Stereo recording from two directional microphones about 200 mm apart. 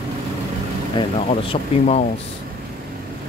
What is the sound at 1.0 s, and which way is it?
Speech, 20° left (ahead or behind).